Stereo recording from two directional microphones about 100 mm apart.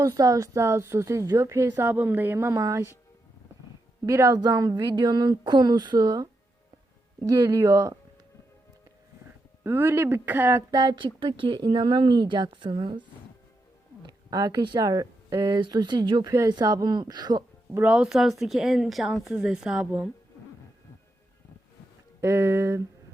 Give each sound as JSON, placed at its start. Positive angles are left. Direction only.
{"t": 0.0, "sound": "a woman's voice", "side_deg": -35}
{"t": 1.9, "sound": "speech", "side_deg": -20}
{"t": 4.0, "sound": "a woman's voice", "side_deg": -35}
{"t": 9.6, "sound": "speech", "side_deg": -25}
{"t": 10.7, "sound": "speech", "side_deg": -45}
{"t": 14.0, "sound": "speech", "side_deg": -40}
{"t": 17.7, "sound": "a woman's voice", "side_deg": -10}
{"t": 22.2, "sound": "speech", "side_deg": -30}